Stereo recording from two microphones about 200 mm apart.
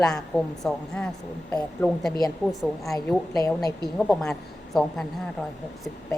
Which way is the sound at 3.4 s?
20° left (ahead or behind).